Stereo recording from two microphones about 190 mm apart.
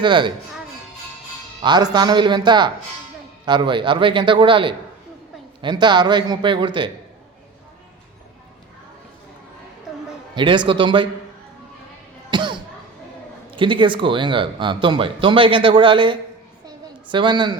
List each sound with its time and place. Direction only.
0.0 s speech: 25° right (ahead or behind)
1.6 s speech: 20° right (ahead or behind)
10.3 s a man's voice: 25° right (ahead or behind)
12.3 s cough: 25° right (ahead or behind)
13.5 s speech: 25° right (ahead or behind)
16.6 s a sound: 25° right (ahead or behind)